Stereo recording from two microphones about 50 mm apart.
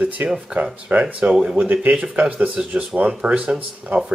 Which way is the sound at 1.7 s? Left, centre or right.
Right.